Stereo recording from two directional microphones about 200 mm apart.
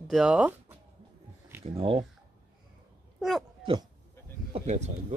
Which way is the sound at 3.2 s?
Centre (ahead or behind).